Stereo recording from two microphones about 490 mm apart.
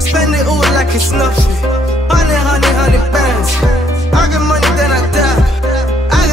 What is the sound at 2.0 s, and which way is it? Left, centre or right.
Music, centre.